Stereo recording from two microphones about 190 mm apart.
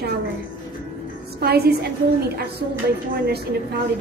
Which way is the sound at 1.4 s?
55° right (ahead or behind).